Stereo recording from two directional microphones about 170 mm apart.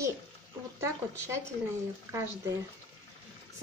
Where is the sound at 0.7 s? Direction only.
15° right (ahead or behind).